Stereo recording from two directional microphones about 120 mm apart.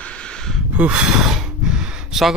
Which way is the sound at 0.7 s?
10° right (ahead or behind).